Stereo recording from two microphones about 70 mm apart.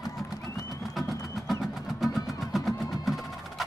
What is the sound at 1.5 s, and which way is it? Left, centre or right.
Music, centre.